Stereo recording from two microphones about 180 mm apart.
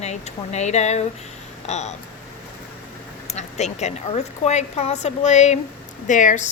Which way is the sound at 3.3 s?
40° left (ahead or behind).